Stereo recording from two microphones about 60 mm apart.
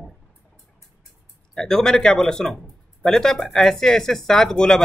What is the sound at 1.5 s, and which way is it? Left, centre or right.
Speech, centre.